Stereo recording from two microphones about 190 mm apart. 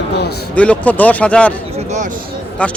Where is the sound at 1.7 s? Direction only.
40° right (ahead or behind).